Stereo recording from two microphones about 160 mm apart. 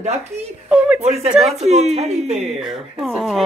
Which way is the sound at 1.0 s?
40° right (ahead or behind).